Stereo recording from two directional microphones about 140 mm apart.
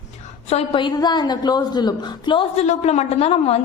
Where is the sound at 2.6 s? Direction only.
50° left (ahead or behind).